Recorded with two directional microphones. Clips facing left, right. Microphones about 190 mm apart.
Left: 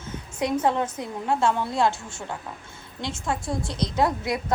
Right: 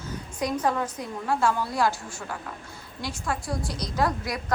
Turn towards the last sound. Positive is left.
turn(degrees=25)  # may be behind; listen again after turning